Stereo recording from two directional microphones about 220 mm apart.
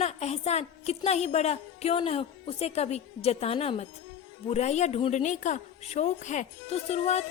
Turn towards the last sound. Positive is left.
turn(degrees=30)  # may be behind; listen again after turning